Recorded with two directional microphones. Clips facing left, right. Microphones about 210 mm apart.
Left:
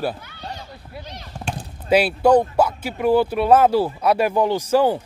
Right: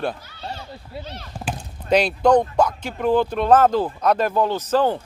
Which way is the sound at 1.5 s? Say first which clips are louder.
Left 1 dB; 5° left (ahead or behind).